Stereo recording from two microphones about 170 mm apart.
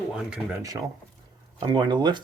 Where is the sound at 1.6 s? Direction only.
30° right (ahead or behind).